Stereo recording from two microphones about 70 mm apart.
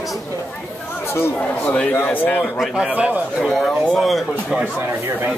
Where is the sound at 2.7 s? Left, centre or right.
Centre.